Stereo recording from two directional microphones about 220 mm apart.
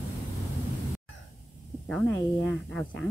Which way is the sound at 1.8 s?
5° left (ahead or behind).